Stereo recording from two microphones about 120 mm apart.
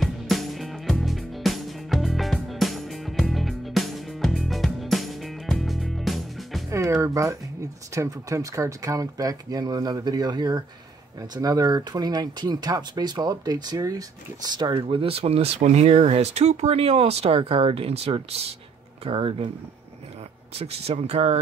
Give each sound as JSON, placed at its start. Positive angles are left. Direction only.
{"t": 0.0, "sound": "music", "side_deg": 0}
{"t": 6.7, "sound": "speech", "side_deg": -25}
{"t": 20.5, "sound": "speech", "side_deg": -60}